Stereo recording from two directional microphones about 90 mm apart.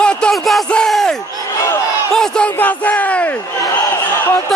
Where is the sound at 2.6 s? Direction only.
20° left (ahead or behind).